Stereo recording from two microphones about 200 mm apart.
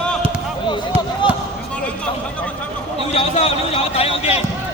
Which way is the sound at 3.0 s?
30° left (ahead or behind).